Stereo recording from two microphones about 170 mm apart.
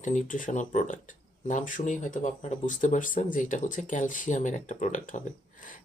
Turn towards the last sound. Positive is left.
turn(degrees=50)  # may be behind; listen again after turning